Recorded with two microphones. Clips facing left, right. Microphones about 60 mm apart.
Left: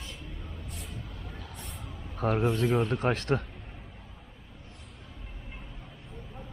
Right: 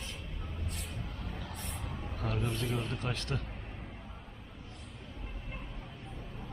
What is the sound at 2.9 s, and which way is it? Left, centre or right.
Speech, left.